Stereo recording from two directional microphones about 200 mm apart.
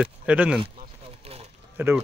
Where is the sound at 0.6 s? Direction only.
30° right (ahead or behind).